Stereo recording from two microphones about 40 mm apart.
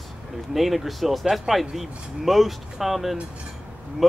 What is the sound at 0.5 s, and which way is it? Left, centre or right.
Speech, centre.